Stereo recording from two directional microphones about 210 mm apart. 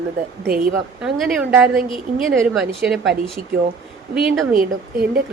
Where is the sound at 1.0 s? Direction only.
5° right (ahead or behind).